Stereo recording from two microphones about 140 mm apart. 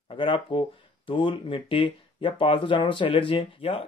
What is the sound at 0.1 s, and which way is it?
Speech, 35° left (ahead or behind).